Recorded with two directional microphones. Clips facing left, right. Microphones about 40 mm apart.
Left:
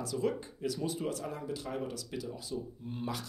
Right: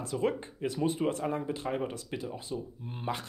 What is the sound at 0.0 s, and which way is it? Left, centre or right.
Speech, right.